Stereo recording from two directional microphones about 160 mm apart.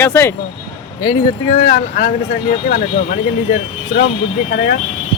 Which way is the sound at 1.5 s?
55° left (ahead or behind).